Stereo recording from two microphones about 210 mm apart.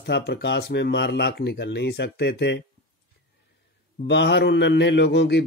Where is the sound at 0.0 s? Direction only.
50° left (ahead or behind).